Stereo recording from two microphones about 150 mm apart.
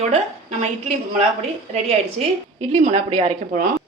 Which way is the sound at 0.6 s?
50° right (ahead or behind).